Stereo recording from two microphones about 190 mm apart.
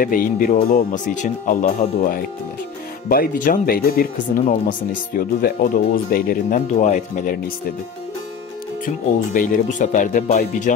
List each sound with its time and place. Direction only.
0.0 s speech: 50° left (ahead or behind)
8.8 s speech: 45° left (ahead or behind)